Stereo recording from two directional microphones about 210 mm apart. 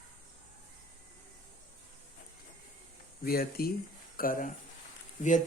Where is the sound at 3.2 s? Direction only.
45° left (ahead or behind).